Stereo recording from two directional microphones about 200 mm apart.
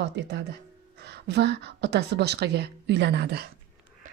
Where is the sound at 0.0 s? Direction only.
60° right (ahead or behind).